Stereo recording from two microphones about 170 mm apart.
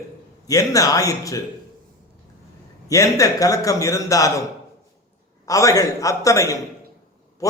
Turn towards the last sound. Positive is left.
turn(degrees=20)  # may be behind; listen again after turning